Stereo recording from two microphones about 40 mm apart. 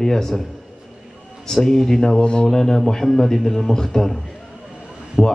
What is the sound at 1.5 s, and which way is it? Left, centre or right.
Speech, centre.